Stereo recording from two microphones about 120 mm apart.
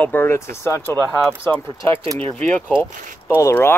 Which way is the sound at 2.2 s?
15° left (ahead or behind).